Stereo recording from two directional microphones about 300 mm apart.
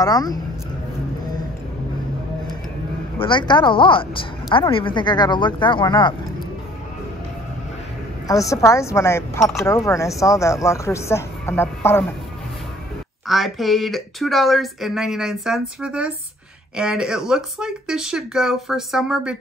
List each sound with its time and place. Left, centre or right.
0.0 s a woman's voice: centre
3.2 s a woman's voice: centre
8.3 s a woman's voice: centre
13.3 s speech: centre